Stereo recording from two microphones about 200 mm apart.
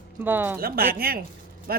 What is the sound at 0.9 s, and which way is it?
Speech, 50° right (ahead or behind).